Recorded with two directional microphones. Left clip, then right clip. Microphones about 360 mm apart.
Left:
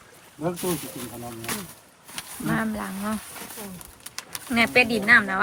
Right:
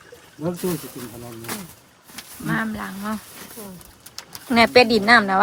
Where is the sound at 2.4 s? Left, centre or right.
Centre.